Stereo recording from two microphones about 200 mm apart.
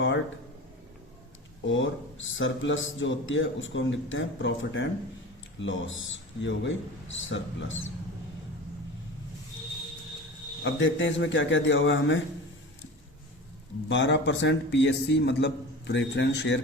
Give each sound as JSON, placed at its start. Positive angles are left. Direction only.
{"t": 1.6, "sound": "speech", "side_deg": 70}
{"t": 10.6, "sound": "speech", "side_deg": 65}
{"t": 13.8, "sound": "a man's voice", "side_deg": 65}